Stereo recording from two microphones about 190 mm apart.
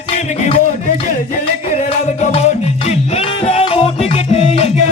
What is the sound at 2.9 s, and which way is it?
Music, 35° left (ahead or behind).